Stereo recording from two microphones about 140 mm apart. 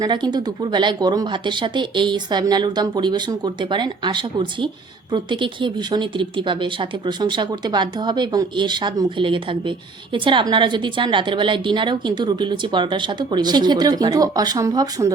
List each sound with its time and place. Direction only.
0.0 s a woman's voice: 30° right (ahead or behind)